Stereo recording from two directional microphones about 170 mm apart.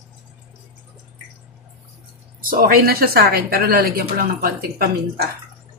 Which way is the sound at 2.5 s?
60° right (ahead or behind).